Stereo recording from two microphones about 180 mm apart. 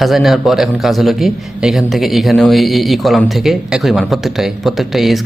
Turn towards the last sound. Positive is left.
turn(degrees=0)  # may be behind; listen again after turning